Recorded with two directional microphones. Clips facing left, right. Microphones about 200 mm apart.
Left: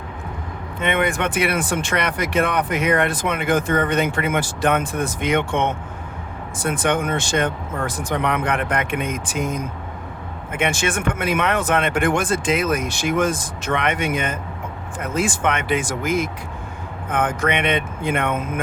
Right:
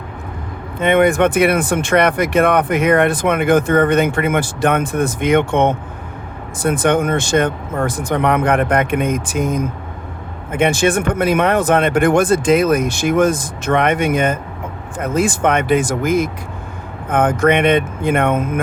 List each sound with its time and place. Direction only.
0.8 s speech: 45° right (ahead or behind)
6.7 s speech: 40° right (ahead or behind)